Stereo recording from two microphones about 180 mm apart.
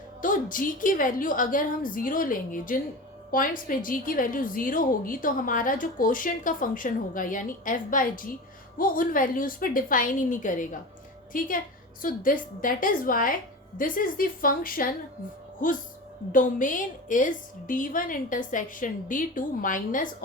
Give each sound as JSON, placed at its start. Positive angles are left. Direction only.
{"t": 0.2, "sound": "a woman's voice", "side_deg": 50}